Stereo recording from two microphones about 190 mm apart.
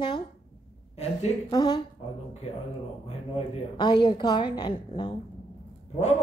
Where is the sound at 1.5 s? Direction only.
20° left (ahead or behind).